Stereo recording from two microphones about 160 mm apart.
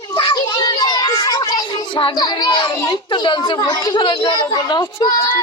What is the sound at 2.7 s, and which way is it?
Speech, 20° left (ahead or behind).